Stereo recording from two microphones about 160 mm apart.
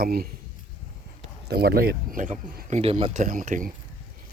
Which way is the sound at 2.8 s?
35° right (ahead or behind).